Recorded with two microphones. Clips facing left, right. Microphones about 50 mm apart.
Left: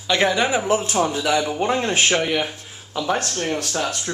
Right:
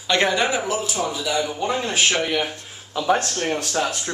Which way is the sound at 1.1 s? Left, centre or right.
Left.